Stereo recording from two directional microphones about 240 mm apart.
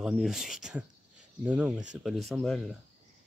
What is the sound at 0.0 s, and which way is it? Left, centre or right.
Speech, centre.